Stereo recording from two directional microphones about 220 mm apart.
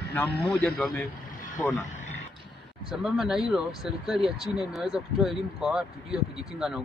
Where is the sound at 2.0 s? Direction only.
30° left (ahead or behind).